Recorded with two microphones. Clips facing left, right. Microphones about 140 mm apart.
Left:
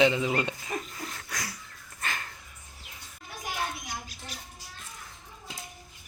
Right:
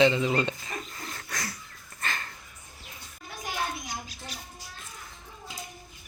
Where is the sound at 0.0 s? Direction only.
10° left (ahead or behind).